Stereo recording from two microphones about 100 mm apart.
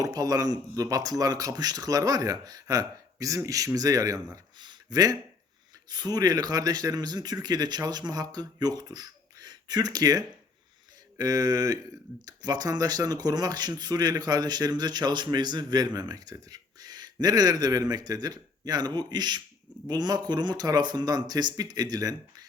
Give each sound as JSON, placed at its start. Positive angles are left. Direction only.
{"t": 0.0, "sound": "speech", "side_deg": -40}